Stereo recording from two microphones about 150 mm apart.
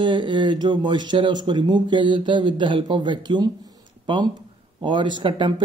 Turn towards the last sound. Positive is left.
turn(degrees=-35)  # may be behind; listen again after turning